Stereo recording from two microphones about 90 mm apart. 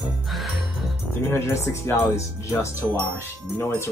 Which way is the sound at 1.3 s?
30° left (ahead or behind).